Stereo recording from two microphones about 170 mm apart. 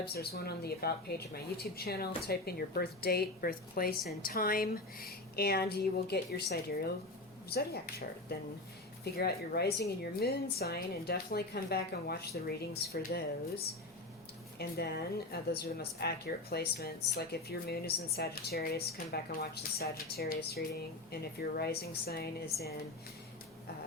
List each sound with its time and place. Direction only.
0.1 s speech: 65° left (ahead or behind)